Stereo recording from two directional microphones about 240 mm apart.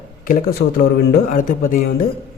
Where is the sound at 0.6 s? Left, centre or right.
Left.